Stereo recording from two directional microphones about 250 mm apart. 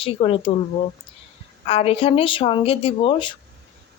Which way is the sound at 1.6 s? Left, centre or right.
Left.